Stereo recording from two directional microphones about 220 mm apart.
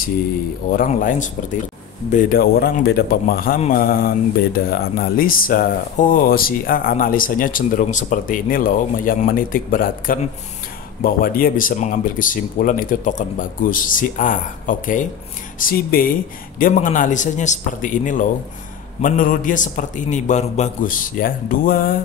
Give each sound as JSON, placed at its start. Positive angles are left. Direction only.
{"t": 0.7, "sound": "speech", "side_deg": 40}